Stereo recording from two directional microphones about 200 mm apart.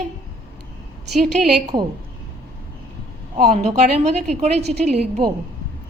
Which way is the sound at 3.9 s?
35° right (ahead or behind).